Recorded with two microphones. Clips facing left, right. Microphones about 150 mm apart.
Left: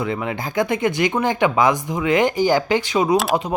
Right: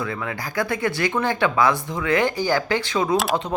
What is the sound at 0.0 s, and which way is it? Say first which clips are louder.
Speech: left 4 dB; 20° left (ahead or behind).